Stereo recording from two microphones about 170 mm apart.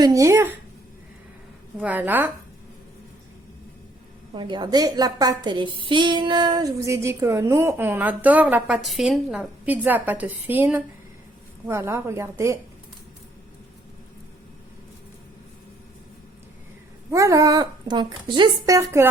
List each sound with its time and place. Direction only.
0.0 s a woman's voice: 20° right (ahead or behind)
1.8 s a woman's voice: 10° right (ahead or behind)
4.4 s a woman's voice: 25° right (ahead or behind)
17.1 s speech: 20° right (ahead or behind)